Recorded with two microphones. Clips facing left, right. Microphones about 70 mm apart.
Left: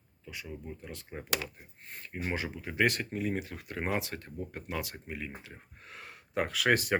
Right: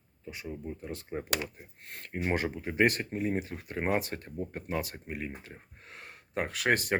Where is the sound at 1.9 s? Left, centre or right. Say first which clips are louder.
Right 4 dB; right.